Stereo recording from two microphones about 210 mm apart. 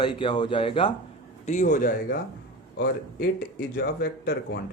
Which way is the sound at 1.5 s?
35° left (ahead or behind).